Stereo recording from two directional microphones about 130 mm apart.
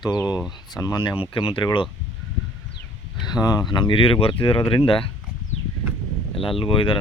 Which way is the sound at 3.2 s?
30° left (ahead or behind).